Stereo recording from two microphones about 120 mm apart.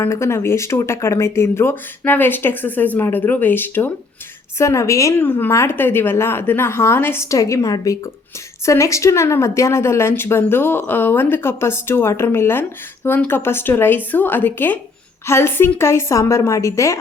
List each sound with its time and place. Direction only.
0.0 s a woman's voice: 20° left (ahead or behind)